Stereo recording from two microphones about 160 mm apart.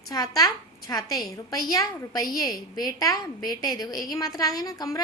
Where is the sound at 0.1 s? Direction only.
20° left (ahead or behind).